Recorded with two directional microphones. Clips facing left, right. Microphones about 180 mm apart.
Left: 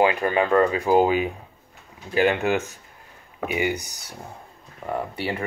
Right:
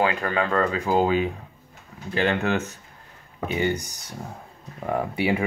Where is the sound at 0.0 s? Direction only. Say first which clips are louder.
Left 3 dB; 15° left (ahead or behind).